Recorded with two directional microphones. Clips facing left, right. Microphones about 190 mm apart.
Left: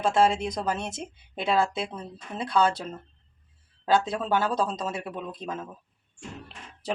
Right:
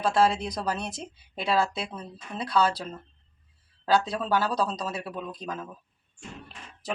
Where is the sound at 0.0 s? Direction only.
20° left (ahead or behind).